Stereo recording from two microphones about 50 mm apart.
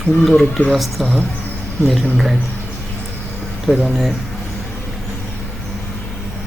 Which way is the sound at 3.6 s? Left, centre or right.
Centre.